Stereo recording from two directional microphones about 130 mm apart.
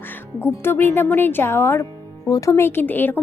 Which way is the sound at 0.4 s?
20° left (ahead or behind).